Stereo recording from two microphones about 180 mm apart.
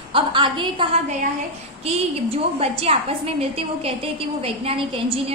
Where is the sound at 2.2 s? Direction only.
35° right (ahead or behind).